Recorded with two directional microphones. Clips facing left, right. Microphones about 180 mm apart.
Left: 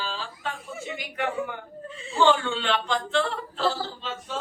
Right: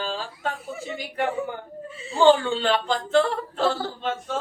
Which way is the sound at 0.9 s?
35° right (ahead or behind).